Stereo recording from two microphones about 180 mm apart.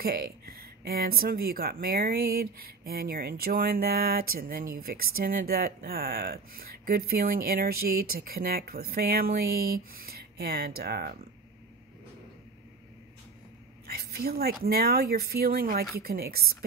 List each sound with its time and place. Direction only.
0.0 s speech: 55° right (ahead or behind)
13.8 s speech: 60° right (ahead or behind)